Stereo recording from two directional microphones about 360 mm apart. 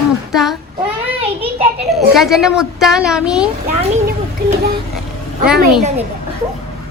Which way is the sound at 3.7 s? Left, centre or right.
Centre.